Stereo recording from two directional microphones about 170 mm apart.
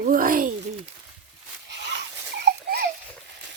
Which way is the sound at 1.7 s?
90° right.